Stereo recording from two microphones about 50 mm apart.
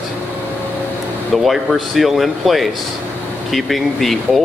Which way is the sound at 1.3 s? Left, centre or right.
Centre.